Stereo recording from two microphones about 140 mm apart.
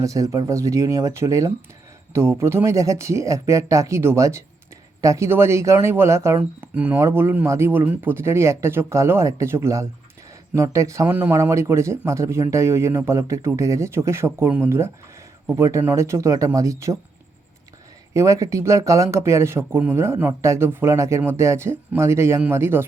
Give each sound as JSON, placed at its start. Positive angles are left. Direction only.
{"t": 0.0, "sound": "speech", "side_deg": -25}
{"t": 18.1, "sound": "speech", "side_deg": -20}